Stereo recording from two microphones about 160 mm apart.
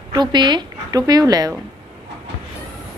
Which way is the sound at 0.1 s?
25° right (ahead or behind).